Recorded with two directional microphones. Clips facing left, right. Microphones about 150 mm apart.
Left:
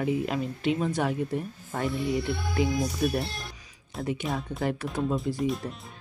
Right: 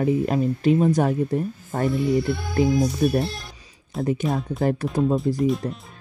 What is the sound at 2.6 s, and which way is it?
Speech, 40° right (ahead or behind).